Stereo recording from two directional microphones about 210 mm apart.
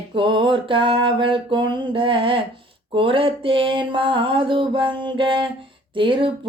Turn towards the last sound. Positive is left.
turn(degrees=-25)  # may be behind; listen again after turning